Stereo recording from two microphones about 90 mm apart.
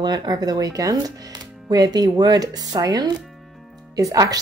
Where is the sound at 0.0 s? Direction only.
55° right (ahead or behind).